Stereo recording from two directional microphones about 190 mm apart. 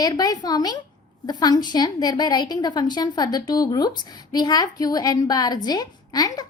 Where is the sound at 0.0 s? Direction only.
20° left (ahead or behind).